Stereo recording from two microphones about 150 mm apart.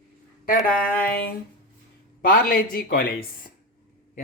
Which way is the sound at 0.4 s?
65° left (ahead or behind).